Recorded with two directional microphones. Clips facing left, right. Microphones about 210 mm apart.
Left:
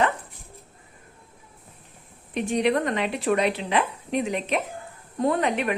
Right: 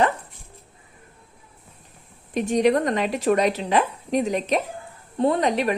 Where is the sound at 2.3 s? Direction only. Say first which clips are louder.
Right 3 dB; 40° right (ahead or behind).